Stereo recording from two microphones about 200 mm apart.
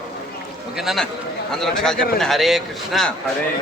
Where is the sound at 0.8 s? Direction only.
Centre (ahead or behind).